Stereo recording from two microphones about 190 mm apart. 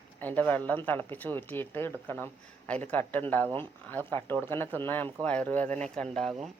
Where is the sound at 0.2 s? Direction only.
10° left (ahead or behind).